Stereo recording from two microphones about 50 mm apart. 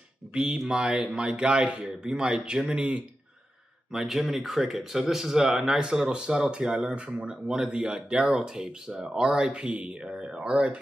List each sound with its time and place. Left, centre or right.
0.3 s speech: centre
3.9 s speech: centre; by 10.8 s right